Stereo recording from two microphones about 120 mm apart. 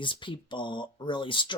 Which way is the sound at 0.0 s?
45° left (ahead or behind).